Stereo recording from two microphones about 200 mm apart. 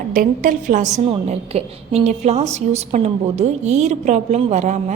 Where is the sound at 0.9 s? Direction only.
30° right (ahead or behind).